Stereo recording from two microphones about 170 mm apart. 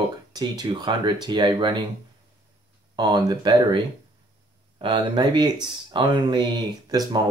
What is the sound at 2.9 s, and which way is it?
Speech, 25° right (ahead or behind).